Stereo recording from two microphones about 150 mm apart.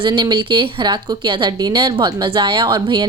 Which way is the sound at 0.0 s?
30° right (ahead or behind).